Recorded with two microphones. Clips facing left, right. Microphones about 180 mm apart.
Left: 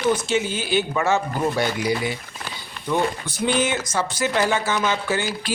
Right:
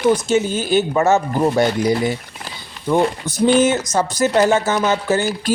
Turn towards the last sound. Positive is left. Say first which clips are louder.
# right 6 dB
turn(degrees=-40)  # may be behind; listen again after turning